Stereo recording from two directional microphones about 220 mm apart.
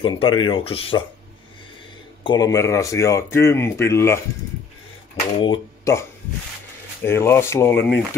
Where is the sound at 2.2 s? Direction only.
15° left (ahead or behind).